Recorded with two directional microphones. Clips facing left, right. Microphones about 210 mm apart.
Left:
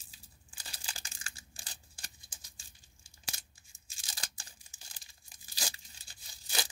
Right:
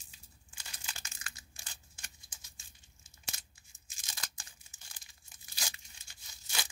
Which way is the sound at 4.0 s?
30° left (ahead or behind).